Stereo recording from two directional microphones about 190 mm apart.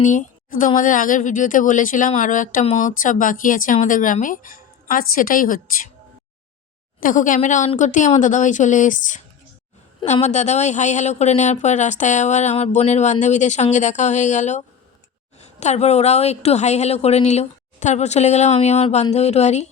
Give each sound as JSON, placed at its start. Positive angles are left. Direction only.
{"t": 0.0, "sound": "a woman's voice", "side_deg": 45}
{"t": 7.0, "sound": "speech", "side_deg": 45}